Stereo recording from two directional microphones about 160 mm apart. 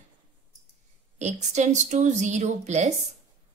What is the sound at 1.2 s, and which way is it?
A woman's voice, 45° right (ahead or behind).